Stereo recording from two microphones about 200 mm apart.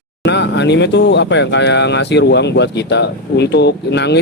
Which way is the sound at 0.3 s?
60° left (ahead or behind).